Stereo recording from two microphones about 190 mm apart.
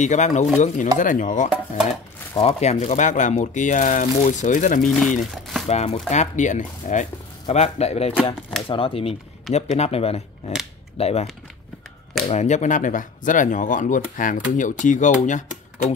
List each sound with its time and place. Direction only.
0.0 s speech: 40° left (ahead or behind)
4.8 s speech: centre (ahead or behind)
5.3 s chopping: centre (ahead or behind)
5.7 s speech: 35° left (ahead or behind)
12.3 s speech: 35° left (ahead or behind)